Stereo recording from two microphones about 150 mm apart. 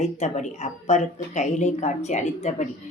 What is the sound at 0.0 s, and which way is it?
Speech, 50° left (ahead or behind).